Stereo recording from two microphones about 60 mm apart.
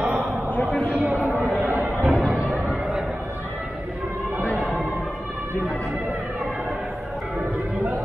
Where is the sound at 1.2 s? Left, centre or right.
Right.